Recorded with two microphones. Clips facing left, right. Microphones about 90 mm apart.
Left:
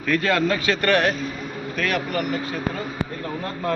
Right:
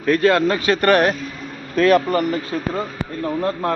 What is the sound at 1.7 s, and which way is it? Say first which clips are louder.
Speech: right 10 dB; 35° right (ahead or behind).